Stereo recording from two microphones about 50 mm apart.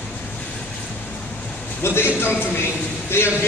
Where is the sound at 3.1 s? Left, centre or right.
Left.